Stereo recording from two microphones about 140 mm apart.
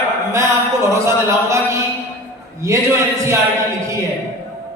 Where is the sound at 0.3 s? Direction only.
20° right (ahead or behind).